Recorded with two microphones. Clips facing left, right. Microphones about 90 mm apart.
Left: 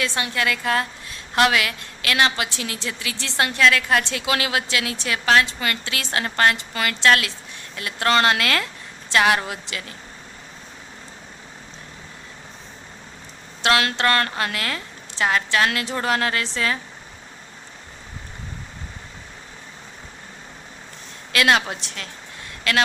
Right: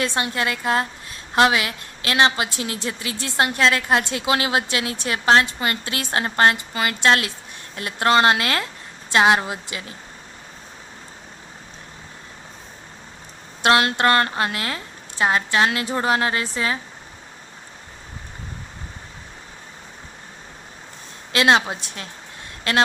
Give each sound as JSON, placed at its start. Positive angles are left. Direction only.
{"t": 0.0, "sound": "a woman's voice", "side_deg": -30}
{"t": 13.6, "sound": "a woman's voice", "side_deg": -25}
{"t": 21.3, "sound": "a woman's voice", "side_deg": -25}